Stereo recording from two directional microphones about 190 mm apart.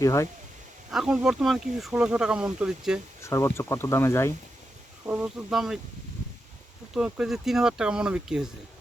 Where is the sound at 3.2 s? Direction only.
15° left (ahead or behind).